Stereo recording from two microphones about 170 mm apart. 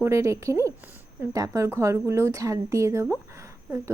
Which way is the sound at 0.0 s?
15° right (ahead or behind).